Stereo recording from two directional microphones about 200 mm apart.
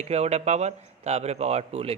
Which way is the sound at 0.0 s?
30° right (ahead or behind).